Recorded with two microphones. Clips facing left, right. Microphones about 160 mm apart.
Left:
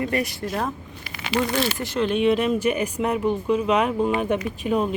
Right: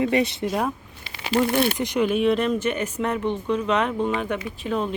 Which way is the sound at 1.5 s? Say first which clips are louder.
Right 3 dB; 55° right (ahead or behind).